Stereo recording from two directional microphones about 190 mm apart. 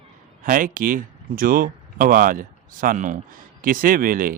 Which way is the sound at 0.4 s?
45° right (ahead or behind).